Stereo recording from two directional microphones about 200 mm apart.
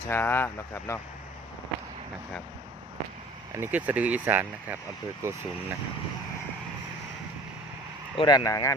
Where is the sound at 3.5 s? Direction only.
10° right (ahead or behind).